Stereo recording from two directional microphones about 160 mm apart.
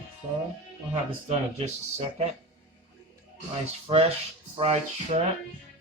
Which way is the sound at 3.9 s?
40° right (ahead or behind).